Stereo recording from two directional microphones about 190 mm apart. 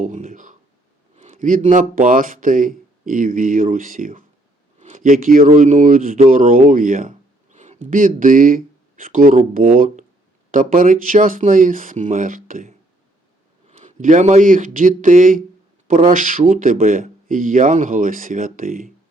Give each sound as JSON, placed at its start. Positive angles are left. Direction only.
{"t": 0.0, "sound": "speech", "side_deg": -40}